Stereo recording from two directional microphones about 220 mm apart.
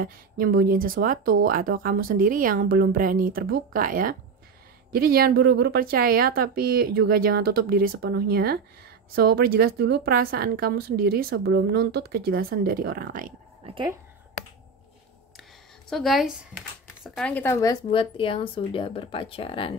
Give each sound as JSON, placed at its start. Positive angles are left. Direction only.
{"t": 0.0, "sound": "a woman's voice", "side_deg": -40}
{"t": 13.7, "sound": "speech", "side_deg": -20}
{"t": 15.9, "sound": "speech", "side_deg": 0}
{"t": 17.8, "sound": "speech", "side_deg": 25}